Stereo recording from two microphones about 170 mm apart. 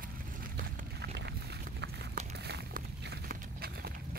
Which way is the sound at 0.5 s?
70° right (ahead or behind).